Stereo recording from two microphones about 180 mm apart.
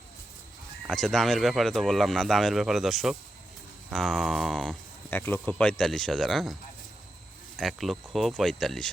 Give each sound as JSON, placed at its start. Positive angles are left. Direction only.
{"t": 0.9, "sound": "speech", "side_deg": 0}
{"t": 7.6, "sound": "speech", "side_deg": 0}